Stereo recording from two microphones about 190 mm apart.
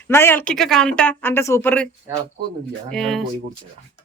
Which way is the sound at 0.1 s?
10° left (ahead or behind).